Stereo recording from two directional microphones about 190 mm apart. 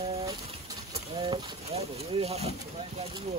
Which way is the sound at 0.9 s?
30° right (ahead or behind).